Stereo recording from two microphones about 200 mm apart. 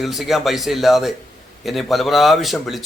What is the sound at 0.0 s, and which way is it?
A man's voice, centre (ahead or behind).